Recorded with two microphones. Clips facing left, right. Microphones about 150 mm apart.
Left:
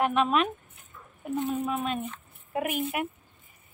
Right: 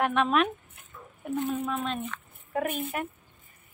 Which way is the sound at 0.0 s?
Centre (ahead or behind).